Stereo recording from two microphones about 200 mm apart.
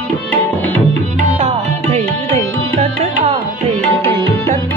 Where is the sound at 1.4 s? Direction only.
30° right (ahead or behind).